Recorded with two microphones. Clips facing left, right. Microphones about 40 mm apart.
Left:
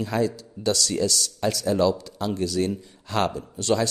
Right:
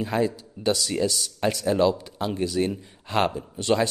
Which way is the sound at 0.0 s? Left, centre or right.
Right.